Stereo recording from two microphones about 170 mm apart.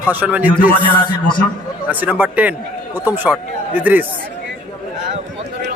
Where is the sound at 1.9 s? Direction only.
10° right (ahead or behind).